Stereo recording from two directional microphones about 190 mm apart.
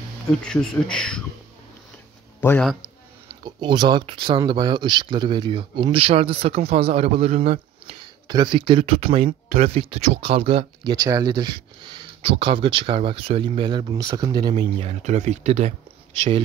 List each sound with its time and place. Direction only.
0.3 s speech: 5° left (ahead or behind)
2.4 s speech: 10° left (ahead or behind)
3.3 s speech: 25° right (ahead or behind)
14.6 s speech: 35° right (ahead or behind)